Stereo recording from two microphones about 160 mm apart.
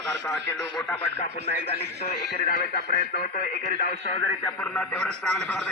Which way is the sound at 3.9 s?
40° left (ahead or behind).